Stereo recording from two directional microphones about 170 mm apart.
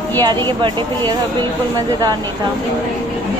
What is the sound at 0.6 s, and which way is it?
Speech, 30° right (ahead or behind).